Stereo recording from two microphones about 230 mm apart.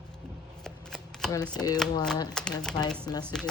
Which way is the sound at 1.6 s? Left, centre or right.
Centre.